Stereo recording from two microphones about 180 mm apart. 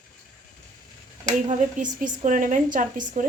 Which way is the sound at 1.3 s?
40° right (ahead or behind).